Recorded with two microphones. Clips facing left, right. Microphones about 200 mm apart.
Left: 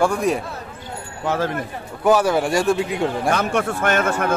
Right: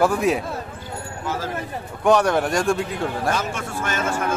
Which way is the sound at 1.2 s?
65° left (ahead or behind).